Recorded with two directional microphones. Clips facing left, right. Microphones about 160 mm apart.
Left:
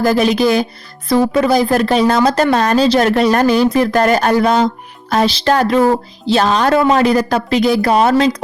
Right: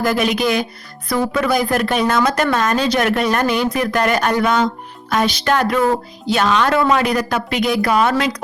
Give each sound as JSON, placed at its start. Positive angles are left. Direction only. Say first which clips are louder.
{"t": 0.0, "sound": "speech", "louder": "left 5 dB", "side_deg": 35}